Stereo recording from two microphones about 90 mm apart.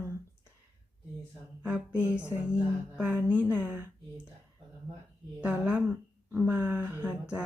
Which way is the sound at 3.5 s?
15° right (ahead or behind).